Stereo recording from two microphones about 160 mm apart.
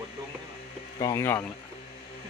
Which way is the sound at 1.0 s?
20° left (ahead or behind).